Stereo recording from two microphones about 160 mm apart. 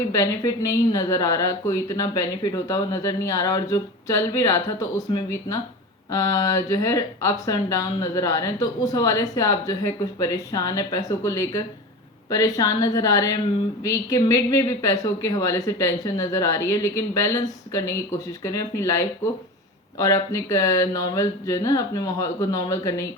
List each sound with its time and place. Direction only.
0.1 s speech: 20° left (ahead or behind)
6.1 s speech: 20° left (ahead or behind)